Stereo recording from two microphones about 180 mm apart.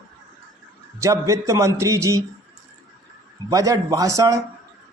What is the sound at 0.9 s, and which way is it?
A man's voice, 15° right (ahead or behind).